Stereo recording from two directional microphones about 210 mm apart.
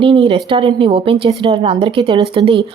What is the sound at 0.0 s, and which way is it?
Speech, 25° right (ahead or behind).